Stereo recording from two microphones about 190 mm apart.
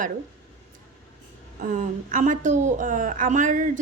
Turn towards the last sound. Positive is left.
turn(degrees=-40)  # may be behind; listen again after turning